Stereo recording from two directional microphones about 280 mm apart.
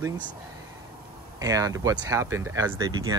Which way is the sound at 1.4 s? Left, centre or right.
Centre.